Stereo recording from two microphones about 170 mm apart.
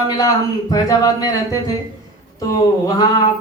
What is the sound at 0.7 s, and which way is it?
A man's voice, 20° left (ahead or behind).